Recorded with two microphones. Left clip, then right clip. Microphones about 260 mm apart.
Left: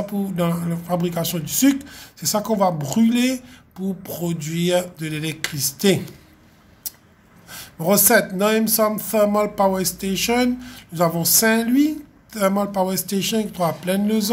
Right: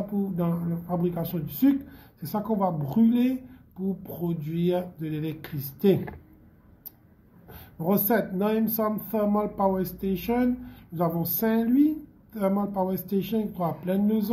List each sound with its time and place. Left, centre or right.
0.1 s speech: left
7.4 s speech: left